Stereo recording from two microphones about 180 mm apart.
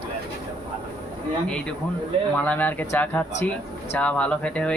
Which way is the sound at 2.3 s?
10° left (ahead or behind).